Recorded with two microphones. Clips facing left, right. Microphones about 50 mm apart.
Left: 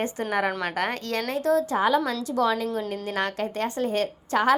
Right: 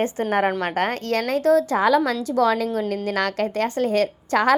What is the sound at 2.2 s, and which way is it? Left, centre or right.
A woman's voice, right.